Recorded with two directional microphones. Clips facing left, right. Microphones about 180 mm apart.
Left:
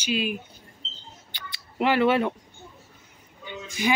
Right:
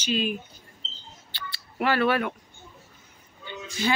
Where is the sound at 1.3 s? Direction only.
20° left (ahead or behind).